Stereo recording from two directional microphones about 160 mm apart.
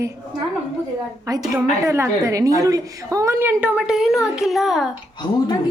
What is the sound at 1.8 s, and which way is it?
A woman's voice, 20° right (ahead or behind).